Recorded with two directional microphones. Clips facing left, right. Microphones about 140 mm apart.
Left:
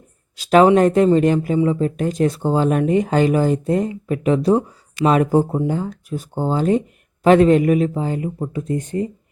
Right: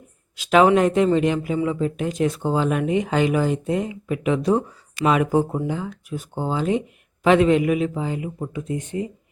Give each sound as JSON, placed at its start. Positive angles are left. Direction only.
{"t": 0.3, "sound": "speech", "side_deg": 35}